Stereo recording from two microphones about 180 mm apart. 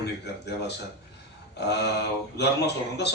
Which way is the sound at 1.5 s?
70° left (ahead or behind).